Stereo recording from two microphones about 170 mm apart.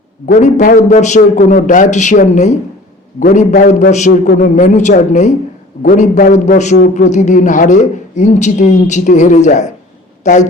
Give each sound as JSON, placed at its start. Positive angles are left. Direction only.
{"t": 0.3, "sound": "a man's voice", "side_deg": 45}